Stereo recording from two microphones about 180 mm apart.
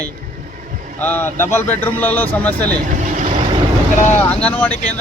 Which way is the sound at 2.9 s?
45° right (ahead or behind).